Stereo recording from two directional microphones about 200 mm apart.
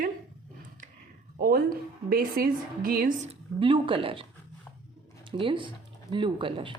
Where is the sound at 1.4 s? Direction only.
45° right (ahead or behind).